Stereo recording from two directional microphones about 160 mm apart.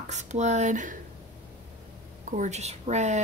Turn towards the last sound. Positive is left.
turn(degrees=-45)  # may be behind; listen again after turning